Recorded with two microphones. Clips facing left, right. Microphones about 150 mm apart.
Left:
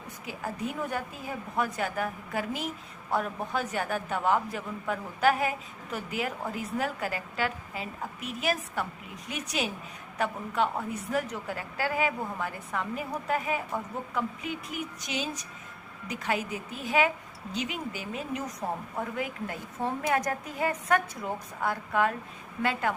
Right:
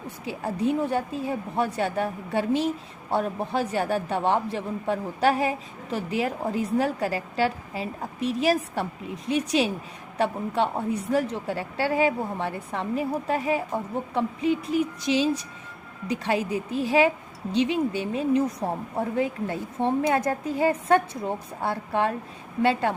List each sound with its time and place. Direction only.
0.3 s a woman's voice: 30° right (ahead or behind)